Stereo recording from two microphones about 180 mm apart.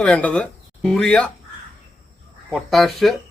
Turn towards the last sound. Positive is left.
turn(degrees=0)  # may be behind; listen again after turning